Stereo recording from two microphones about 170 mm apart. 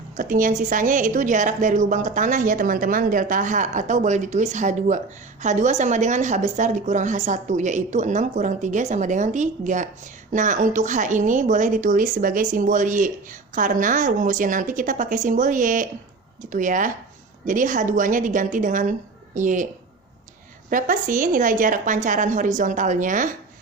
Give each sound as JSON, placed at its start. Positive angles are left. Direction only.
{"t": 0.2, "sound": "a woman's voice", "side_deg": -50}
{"t": 20.7, "sound": "a woman's voice", "side_deg": -50}